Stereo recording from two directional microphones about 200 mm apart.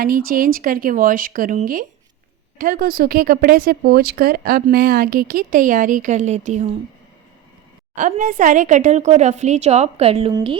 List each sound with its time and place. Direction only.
0.0 s a woman's voice: 45° right (ahead or behind)
7.9 s a woman's voice: 40° right (ahead or behind)